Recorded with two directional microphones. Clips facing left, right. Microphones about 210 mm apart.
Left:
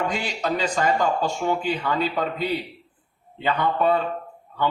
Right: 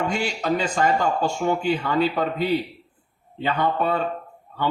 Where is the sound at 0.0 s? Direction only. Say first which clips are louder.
Right 1 dB; 50° right (ahead or behind).